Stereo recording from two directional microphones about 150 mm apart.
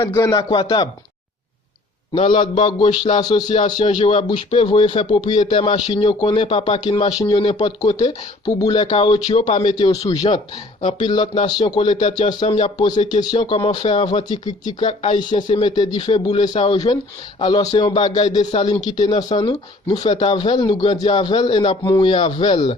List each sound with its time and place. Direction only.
0.0 s speech: 20° left (ahead or behind)
2.1 s speech: 40° left (ahead or behind)
10.3 s speech: 35° left (ahead or behind)
12.7 s speech: 30° left (ahead or behind)
14.8 s speech: 45° left (ahead or behind)
15.3 s speech: 30° left (ahead or behind)
21.8 s speech: 20° left (ahead or behind)
22.1 s speech: 35° left (ahead or behind)